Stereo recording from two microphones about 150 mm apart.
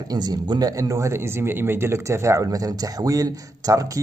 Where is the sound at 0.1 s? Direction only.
25° right (ahead or behind).